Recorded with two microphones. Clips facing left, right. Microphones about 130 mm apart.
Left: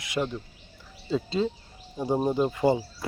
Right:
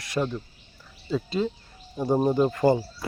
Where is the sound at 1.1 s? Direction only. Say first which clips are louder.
Even; 25° left (ahead or behind).